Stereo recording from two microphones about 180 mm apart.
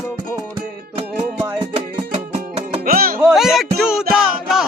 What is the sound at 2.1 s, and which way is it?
Music, 35° right (ahead or behind).